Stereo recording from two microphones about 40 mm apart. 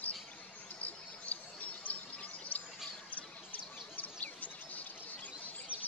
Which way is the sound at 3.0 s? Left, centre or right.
Left.